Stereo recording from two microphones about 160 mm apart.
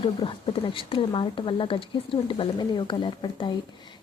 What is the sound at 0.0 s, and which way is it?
Speech, 30° left (ahead or behind).